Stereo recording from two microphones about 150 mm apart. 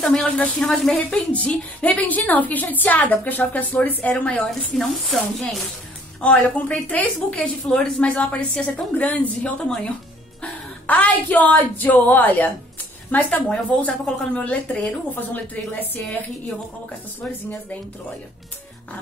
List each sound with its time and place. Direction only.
0.0 s a woman's voice: 5° left (ahead or behind)
6.2 s a woman's voice: 10° left (ahead or behind)
17.2 s a woman's voice: 10° left (ahead or behind)